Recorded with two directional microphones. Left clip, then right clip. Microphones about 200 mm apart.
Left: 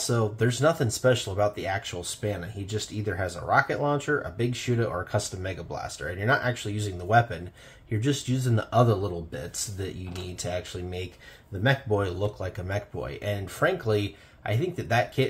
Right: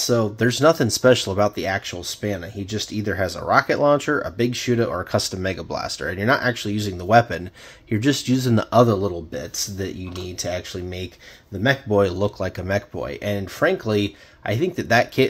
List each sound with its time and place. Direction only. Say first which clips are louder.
0.0 s speech: right 7 dB; 40° right (ahead or behind)